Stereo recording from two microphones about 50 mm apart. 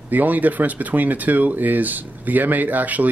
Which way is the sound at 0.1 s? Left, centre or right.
Right.